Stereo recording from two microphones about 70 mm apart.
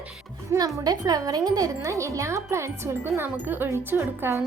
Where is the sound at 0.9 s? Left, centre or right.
Right.